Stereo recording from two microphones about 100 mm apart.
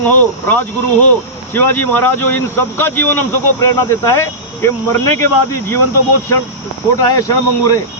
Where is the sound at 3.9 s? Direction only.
30° left (ahead or behind).